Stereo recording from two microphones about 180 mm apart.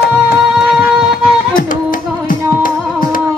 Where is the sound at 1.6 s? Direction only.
50° left (ahead or behind).